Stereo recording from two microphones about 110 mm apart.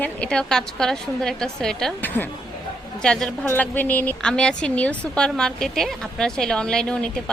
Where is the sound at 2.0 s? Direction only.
15° left (ahead or behind).